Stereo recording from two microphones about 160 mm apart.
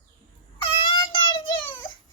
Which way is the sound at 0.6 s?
35° left (ahead or behind).